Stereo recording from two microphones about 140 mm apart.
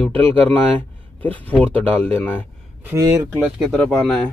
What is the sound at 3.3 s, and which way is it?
Speech, centre (ahead or behind).